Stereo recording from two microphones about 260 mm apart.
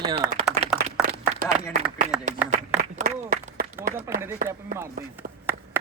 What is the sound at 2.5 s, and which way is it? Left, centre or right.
Applause, right.